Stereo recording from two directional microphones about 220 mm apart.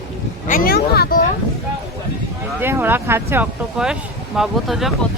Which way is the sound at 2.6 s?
10° right (ahead or behind).